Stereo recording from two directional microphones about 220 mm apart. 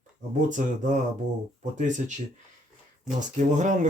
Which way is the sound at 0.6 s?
35° right (ahead or behind).